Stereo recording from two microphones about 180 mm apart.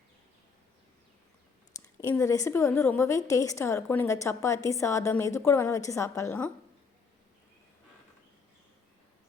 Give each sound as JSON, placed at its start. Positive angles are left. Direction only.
{"t": 1.7, "sound": "a woman's voice", "side_deg": 20}